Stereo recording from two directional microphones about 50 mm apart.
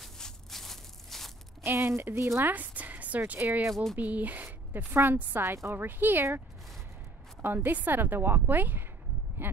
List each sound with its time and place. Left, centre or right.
0.0 s a sound: centre
1.6 s a woman's voice: right
2.4 s a sound: right
3.3 s a woman's voice: right
5.4 s speech: right
5.8 s speech: right
7.4 s a woman's voice: right